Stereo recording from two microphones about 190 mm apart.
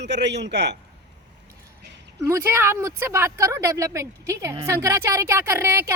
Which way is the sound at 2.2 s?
15° right (ahead or behind).